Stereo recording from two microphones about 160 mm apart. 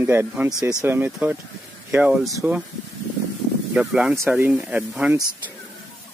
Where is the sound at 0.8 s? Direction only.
10° right (ahead or behind).